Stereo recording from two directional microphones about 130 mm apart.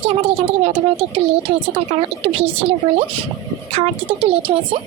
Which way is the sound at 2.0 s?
50° right (ahead or behind).